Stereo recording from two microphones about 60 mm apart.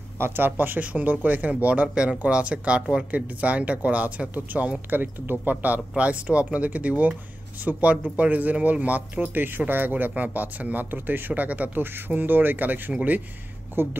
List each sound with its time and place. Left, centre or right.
0.5 s speech: right